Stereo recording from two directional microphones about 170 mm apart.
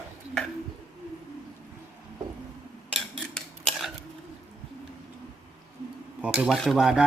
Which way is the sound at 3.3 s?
Centre (ahead or behind).